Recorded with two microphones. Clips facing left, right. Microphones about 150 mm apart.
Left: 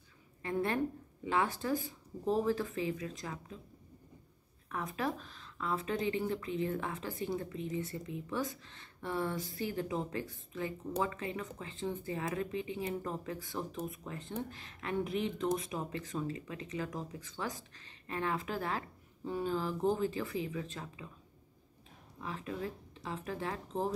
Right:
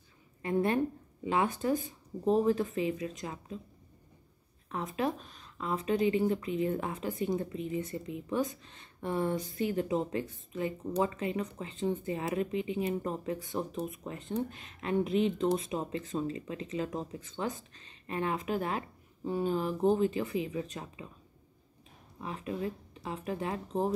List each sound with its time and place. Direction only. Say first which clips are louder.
0.4 s a woman's voice: right 4 dB; 20° right (ahead or behind)
4.6 s speech: right 4 dB; 20° right (ahead or behind)
22.2 s speech: right 4 dB; 20° right (ahead or behind)